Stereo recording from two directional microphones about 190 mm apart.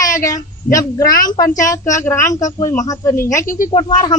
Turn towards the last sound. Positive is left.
turn(degrees=20)  # may be behind; listen again after turning